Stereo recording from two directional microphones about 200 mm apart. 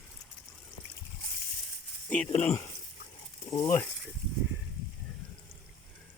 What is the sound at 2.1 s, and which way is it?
Speech, 5° left (ahead or behind).